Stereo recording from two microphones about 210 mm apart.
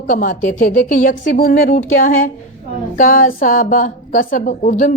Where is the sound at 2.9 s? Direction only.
40° left (ahead or behind).